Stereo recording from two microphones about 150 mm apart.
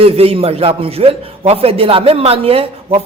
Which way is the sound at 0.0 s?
40° right (ahead or behind).